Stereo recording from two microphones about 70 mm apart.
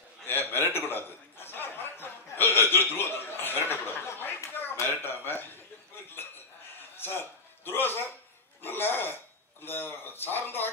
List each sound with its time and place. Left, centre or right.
0.3 s chuckle: left
4.5 s a sound: left
4.7 s speech: left
7.0 s a man's voice: left